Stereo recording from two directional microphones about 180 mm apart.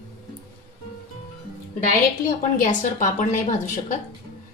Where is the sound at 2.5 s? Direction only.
45° left (ahead or behind).